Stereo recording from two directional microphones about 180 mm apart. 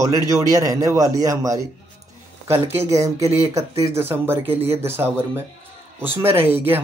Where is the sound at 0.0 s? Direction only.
20° right (ahead or behind).